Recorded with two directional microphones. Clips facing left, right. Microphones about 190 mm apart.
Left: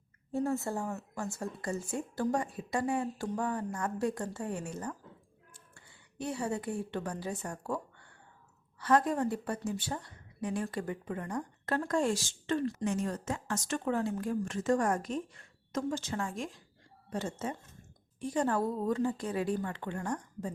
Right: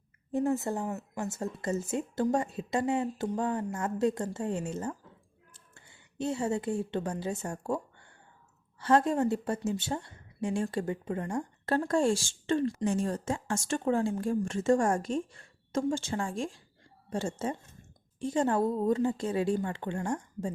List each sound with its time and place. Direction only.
0.3 s a woman's voice: 20° right (ahead or behind)